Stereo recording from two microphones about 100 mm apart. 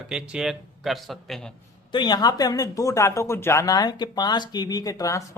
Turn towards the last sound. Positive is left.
turn(degrees=35)  # may be behind; listen again after turning